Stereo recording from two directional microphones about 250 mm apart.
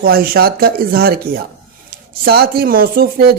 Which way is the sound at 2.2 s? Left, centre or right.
Right.